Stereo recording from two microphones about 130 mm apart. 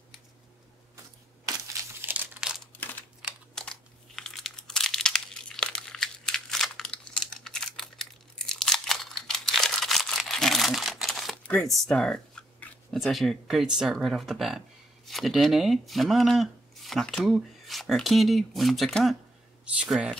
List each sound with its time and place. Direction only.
2.0 s crumpling: 15° right (ahead or behind)
2.4 s a sound: centre (ahead or behind)
3.5 s crumpling: 5° left (ahead or behind)
11.4 s speech: 5° left (ahead or behind)